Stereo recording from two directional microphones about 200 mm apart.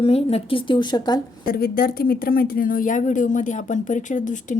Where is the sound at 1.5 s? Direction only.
50° left (ahead or behind).